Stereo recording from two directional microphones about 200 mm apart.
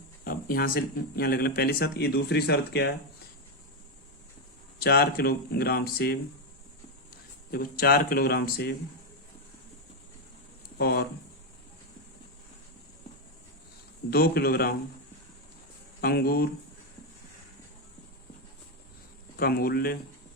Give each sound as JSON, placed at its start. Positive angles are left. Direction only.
{"t": 0.3, "sound": "speech", "side_deg": 45}
{"t": 4.8, "sound": "speech", "side_deg": 50}
{"t": 7.5, "sound": "speech", "side_deg": 50}
{"t": 10.8, "sound": "speech", "side_deg": 50}
{"t": 14.1, "sound": "speech", "side_deg": 50}
{"t": 16.0, "sound": "speech", "side_deg": 50}
{"t": 19.4, "sound": "speech", "side_deg": 50}